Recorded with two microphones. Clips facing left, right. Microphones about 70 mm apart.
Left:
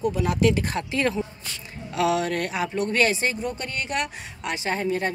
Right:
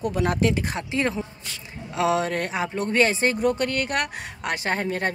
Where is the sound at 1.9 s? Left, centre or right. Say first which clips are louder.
Even; right.